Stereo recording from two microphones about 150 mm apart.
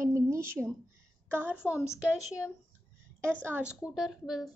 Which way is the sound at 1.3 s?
10° right (ahead or behind).